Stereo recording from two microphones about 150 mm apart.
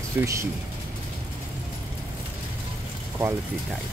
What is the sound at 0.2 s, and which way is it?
Speech, 20° right (ahead or behind).